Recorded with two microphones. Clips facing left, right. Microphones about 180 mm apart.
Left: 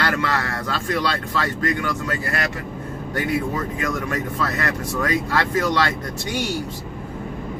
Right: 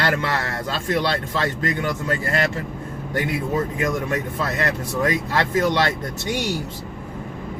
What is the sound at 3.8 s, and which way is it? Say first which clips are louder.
Speech: right 2 dB; 20° right (ahead or behind).